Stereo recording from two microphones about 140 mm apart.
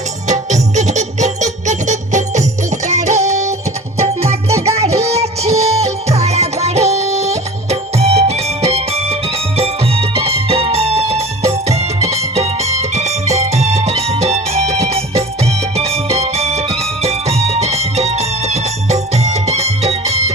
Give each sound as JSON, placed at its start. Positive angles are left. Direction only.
{"t": 0.3, "sound": "music", "side_deg": -55}